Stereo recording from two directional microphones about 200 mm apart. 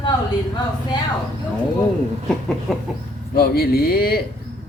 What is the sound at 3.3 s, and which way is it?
Speech, 50° left (ahead or behind).